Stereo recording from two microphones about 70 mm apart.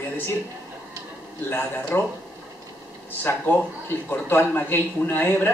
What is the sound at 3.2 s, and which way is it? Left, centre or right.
Speech, left.